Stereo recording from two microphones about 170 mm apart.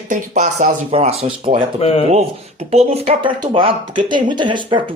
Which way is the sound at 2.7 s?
40° right (ahead or behind).